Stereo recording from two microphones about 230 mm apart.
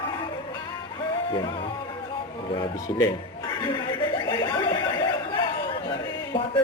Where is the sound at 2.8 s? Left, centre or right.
Centre.